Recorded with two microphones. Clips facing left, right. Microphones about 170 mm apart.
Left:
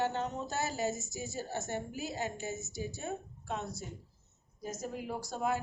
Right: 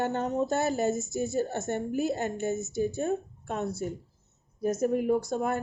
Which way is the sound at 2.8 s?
55° right (ahead or behind).